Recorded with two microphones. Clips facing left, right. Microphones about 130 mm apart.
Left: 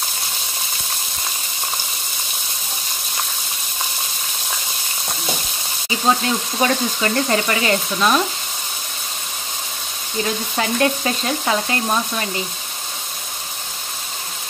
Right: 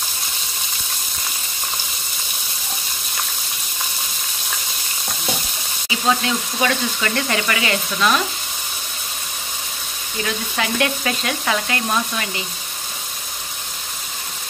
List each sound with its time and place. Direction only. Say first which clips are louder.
6.2 s speech: left 2 dB; 30° left (ahead or behind)
10.2 s stir: left 1 dB; 30° left (ahead or behind)